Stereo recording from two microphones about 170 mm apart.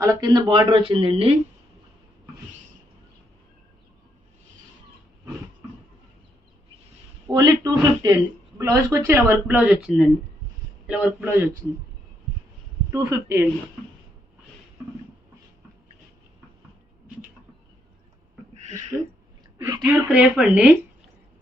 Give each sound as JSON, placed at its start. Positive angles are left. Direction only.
{"t": 0.0, "sound": "speech", "side_deg": -20}
{"t": 7.3, "sound": "speech", "side_deg": -20}
{"t": 10.8, "sound": "speech", "side_deg": -10}
{"t": 12.9, "sound": "speech", "side_deg": -20}
{"t": 18.9, "sound": "a woman's voice", "side_deg": -15}
{"t": 19.8, "sound": "speech", "side_deg": -5}